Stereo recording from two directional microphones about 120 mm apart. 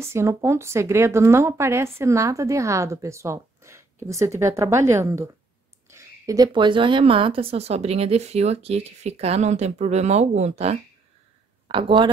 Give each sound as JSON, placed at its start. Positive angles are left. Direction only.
{"t": 0.0, "sound": "a woman's voice", "side_deg": -25}
{"t": 11.6, "sound": "speech", "side_deg": -45}